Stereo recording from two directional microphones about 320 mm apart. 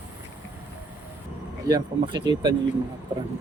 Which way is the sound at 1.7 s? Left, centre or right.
Centre.